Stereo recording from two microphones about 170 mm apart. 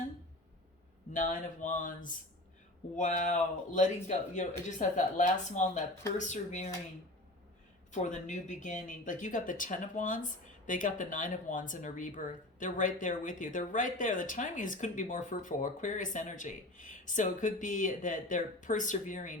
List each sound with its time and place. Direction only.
1.1 s speech: 50° left (ahead or behind)
7.9 s speech: 45° left (ahead or behind)